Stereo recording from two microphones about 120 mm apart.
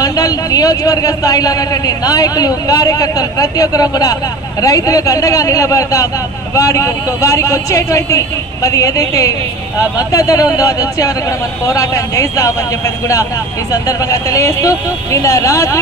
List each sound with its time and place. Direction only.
0.0 s a man's voice: 30° left (ahead or behind)
13.7 s speech: 30° left (ahead or behind)